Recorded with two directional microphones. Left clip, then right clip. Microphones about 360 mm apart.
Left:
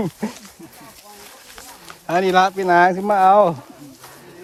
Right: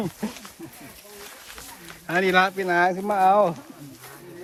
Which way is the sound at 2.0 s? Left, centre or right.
Centre.